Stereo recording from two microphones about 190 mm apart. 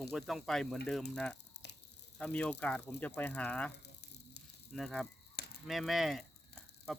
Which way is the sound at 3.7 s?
60° left (ahead or behind).